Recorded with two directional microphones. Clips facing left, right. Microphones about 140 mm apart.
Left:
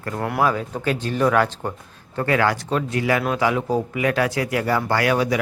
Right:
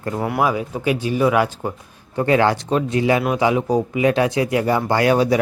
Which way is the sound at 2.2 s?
25° right (ahead or behind).